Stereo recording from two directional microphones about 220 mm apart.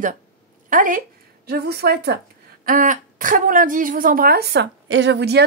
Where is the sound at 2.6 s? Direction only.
35° right (ahead or behind).